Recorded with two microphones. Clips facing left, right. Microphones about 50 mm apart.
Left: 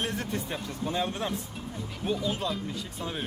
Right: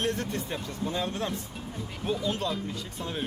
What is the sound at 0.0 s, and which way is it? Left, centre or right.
Speech, centre.